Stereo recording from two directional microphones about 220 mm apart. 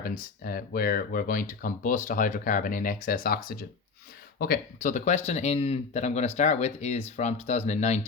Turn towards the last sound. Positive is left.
turn(degrees=30)  # may be behind; listen again after turning